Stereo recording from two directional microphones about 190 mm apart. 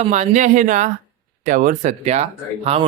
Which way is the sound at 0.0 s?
35° right (ahead or behind).